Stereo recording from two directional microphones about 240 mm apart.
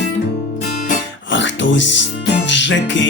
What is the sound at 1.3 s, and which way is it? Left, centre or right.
Music, left.